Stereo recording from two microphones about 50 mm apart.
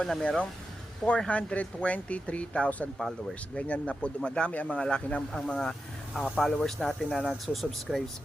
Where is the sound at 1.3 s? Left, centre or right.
Left.